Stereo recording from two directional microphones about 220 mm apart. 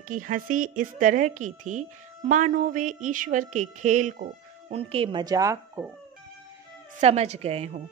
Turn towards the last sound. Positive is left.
turn(degrees=-30)  # may be behind; listen again after turning